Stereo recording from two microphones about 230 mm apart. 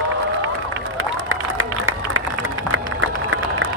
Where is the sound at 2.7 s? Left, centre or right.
Right.